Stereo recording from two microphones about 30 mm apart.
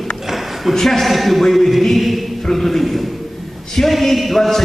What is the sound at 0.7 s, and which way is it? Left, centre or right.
A man's voice, centre.